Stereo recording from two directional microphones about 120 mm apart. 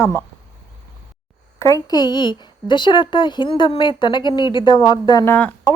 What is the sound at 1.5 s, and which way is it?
Speech, 25° left (ahead or behind).